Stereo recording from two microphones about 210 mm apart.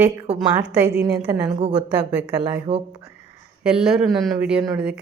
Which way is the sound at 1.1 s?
15° right (ahead or behind).